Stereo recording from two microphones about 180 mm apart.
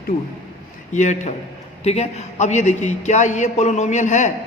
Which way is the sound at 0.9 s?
40° left (ahead or behind).